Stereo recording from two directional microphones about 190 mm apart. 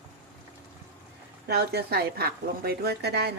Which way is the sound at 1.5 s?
60° right (ahead or behind).